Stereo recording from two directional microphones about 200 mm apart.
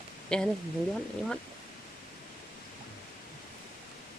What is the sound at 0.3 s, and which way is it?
Speech, 5° left (ahead or behind).